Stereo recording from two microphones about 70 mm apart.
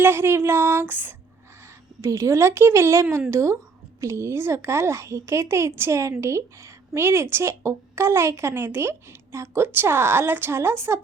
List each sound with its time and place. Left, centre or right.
0.0 s a woman's voice: right
2.0 s a woman's voice: right